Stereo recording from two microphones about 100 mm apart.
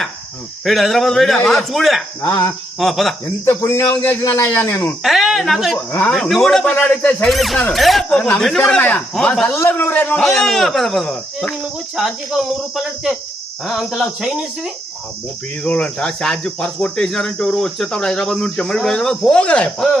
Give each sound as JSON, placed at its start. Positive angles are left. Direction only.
{"t": 0.6, "sound": "speech", "side_deg": 0}
{"t": 2.2, "sound": "a man's voice", "side_deg": 25}
{"t": 2.7, "sound": "speech", "side_deg": 0}
{"t": 3.4, "sound": "a man's voice", "side_deg": 25}
{"t": 5.0, "sound": "speech", "side_deg": 0}
{"t": 6.7, "sound": "speech", "side_deg": 15}
{"t": 7.3, "sound": "speech", "side_deg": 0}
{"t": 9.6, "sound": "a man's voice", "side_deg": 20}
{"t": 10.2, "sound": "speech", "side_deg": 5}
{"t": 13.7, "sound": "speech", "side_deg": 0}
{"t": 15.6, "sound": "speech", "side_deg": 10}